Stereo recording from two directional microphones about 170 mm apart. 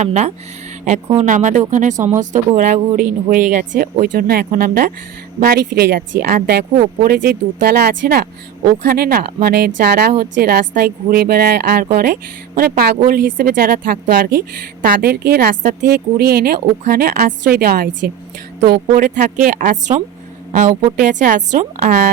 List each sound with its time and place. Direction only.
0.0 s speech: 40° right (ahead or behind)
4.0 s a woman's voice: 60° right (ahead or behind)